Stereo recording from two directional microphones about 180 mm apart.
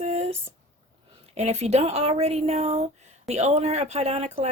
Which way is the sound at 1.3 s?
40° right (ahead or behind).